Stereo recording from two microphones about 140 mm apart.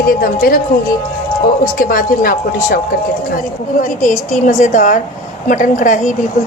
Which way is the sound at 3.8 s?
70° left (ahead or behind).